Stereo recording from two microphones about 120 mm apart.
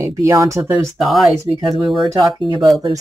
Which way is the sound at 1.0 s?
Centre (ahead or behind).